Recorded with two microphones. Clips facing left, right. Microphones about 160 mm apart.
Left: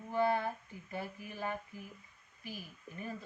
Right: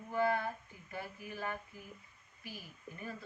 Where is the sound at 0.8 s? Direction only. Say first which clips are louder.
Left 2 dB; 20° left (ahead or behind).